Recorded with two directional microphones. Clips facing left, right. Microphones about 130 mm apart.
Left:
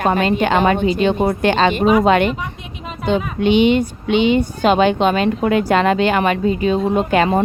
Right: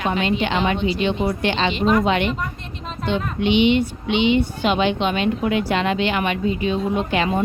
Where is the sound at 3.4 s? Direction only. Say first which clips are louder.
Left 3 dB; 45° left (ahead or behind).